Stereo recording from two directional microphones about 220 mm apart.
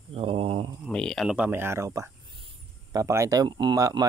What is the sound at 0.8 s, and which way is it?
Speech, centre (ahead or behind).